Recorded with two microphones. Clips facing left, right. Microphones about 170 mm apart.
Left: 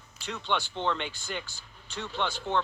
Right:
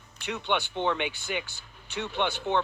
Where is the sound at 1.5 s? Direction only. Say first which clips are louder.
Right 4 dB; 65° right (ahead or behind).